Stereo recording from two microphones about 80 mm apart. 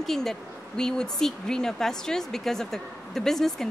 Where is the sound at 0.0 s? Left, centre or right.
Centre.